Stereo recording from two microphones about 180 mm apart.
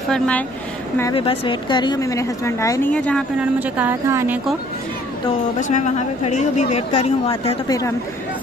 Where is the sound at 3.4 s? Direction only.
10° right (ahead or behind).